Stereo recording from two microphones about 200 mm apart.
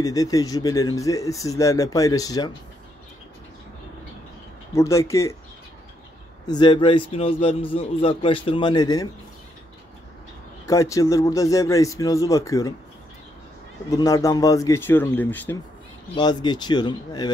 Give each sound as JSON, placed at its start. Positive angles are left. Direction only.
{"t": 0.0, "sound": "speech", "side_deg": 15}
{"t": 4.7, "sound": "speech", "side_deg": 15}
{"t": 6.4, "sound": "a man's voice", "side_deg": 20}
{"t": 10.7, "sound": "speech", "side_deg": 15}
{"t": 13.8, "sound": "speech", "side_deg": 20}
{"t": 16.2, "sound": "a man's voice", "side_deg": 20}